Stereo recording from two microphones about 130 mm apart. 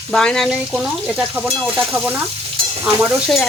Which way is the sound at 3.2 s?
Centre (ahead or behind).